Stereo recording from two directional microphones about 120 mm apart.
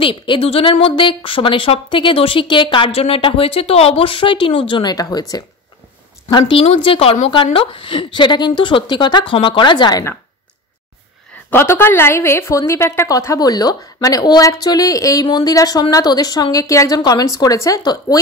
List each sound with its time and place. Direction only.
0.0 s speech: 50° left (ahead or behind)
4.9 s a woman's voice: 30° left (ahead or behind)
6.3 s speech: 50° left (ahead or behind); by 10.1 s 30° left (ahead or behind)
11.5 s a woman's voice: 20° left (ahead or behind)